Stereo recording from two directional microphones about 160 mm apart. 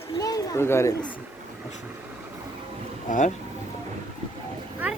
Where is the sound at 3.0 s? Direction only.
55° left (ahead or behind).